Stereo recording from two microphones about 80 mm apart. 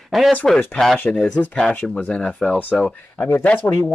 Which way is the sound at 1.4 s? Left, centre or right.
Centre.